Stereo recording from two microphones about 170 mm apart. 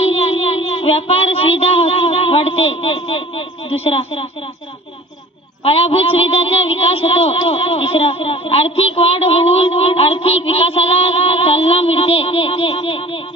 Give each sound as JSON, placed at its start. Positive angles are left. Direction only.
{"t": 0.0, "sound": "child singing", "side_deg": 35}
{"t": 0.7, "sound": "speech", "side_deg": 35}
{"t": 5.6, "sound": "speech", "side_deg": 35}